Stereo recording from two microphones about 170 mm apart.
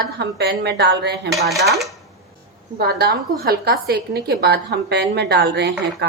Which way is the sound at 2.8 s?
70° right (ahead or behind).